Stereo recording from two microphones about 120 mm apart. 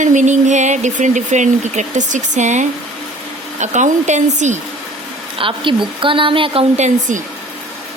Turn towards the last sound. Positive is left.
turn(degrees=-80)